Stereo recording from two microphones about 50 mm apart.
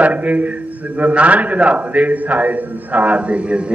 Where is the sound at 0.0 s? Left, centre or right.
Right.